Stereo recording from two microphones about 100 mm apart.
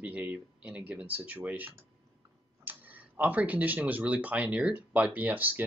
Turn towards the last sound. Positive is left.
turn(degrees=-20)  # may be behind; listen again after turning